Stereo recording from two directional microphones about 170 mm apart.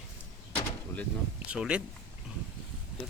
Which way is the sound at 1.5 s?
5° right (ahead or behind).